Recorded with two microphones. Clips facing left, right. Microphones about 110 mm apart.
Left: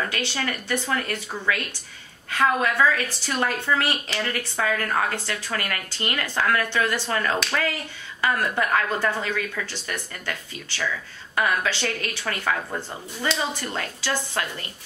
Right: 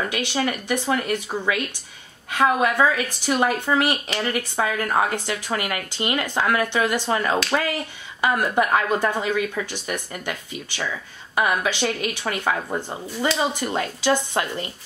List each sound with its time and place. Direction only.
0.1 s speech: 15° right (ahead or behind)